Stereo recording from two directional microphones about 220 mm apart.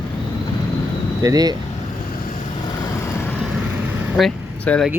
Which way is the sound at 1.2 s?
15° right (ahead or behind).